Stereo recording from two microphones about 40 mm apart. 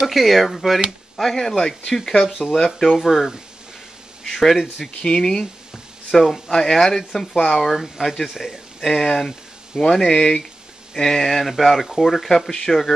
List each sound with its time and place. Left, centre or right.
0.0 s speech: centre
1.9 s speech: centre
2.2 s speech: centre
2.5 s speech: centre
2.9 s speech: centre
4.2 s speech: centre
5.0 s speech: centre
6.1 s speech: centre